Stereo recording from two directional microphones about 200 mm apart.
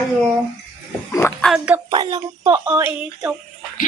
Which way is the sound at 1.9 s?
20° right (ahead or behind).